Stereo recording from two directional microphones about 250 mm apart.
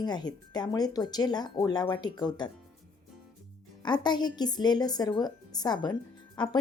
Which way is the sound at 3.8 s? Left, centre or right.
Centre.